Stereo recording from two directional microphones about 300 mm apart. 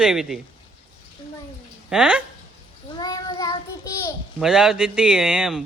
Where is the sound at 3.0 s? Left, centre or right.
Centre.